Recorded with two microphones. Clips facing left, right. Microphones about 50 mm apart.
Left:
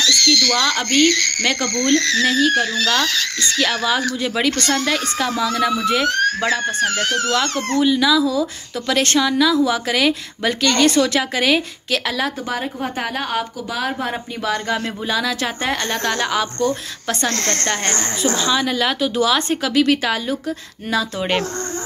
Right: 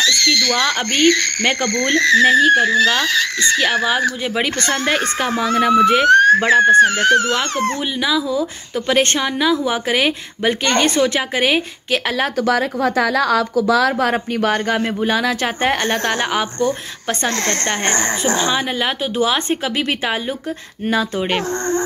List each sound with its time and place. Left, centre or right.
0.0 s speech: centre
12.4 s speech: right
15.0 s speech: right
15.8 s a woman's voice: centre
17.3 s speech: centre